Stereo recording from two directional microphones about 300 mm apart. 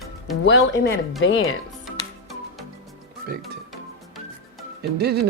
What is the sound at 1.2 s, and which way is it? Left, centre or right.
Speech, left.